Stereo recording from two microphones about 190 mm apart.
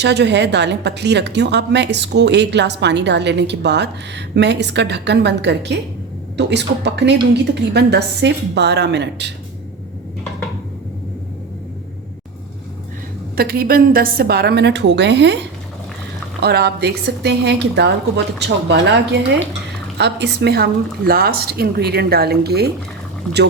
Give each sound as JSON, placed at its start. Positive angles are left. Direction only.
{"t": 0.0, "sound": "a woman's voice", "side_deg": -65}
{"t": 13.3, "sound": "a woman's voice", "side_deg": -55}
{"t": 16.4, "sound": "a woman's voice", "side_deg": -55}